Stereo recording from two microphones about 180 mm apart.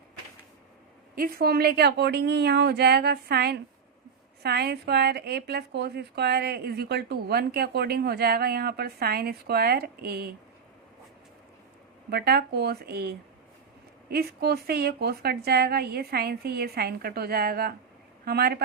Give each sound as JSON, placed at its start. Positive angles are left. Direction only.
{"t": 1.1, "sound": "a woman's voice", "side_deg": -55}
{"t": 12.1, "sound": "a woman's voice", "side_deg": -60}